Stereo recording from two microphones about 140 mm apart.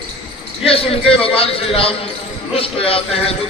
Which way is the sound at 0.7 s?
45° left (ahead or behind).